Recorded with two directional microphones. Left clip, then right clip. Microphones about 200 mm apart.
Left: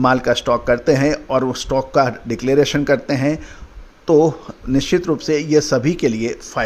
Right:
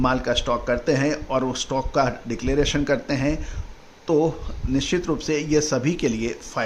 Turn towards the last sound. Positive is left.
turn(degrees=25)  # may be behind; listen again after turning